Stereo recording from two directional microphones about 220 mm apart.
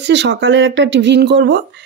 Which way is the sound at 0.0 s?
50° right (ahead or behind).